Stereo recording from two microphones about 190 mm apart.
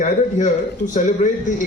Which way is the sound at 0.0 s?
40° left (ahead or behind).